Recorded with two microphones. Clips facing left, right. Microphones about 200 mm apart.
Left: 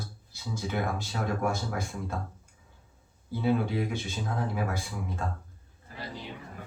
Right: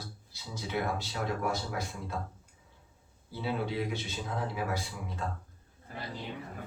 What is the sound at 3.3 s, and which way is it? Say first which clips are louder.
Speech: left 6 dB; 50° left (ahead or behind).